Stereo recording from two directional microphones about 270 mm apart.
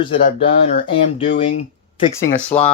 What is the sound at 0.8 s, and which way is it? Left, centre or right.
Speech, centre.